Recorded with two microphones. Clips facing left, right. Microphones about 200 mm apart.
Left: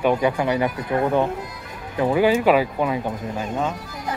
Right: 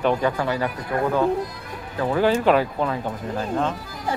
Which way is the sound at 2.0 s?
15° left (ahead or behind).